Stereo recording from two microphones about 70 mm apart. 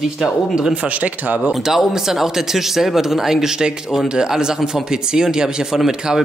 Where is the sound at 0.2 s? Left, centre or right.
Centre.